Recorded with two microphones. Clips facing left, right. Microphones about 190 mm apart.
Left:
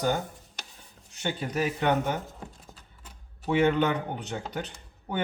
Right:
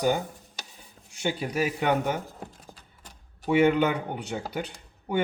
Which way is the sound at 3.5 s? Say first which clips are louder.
Right 2 dB; 10° right (ahead or behind).